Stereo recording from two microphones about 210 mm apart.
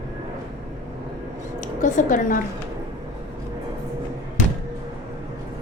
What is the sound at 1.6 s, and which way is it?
Music, 40° left (ahead or behind).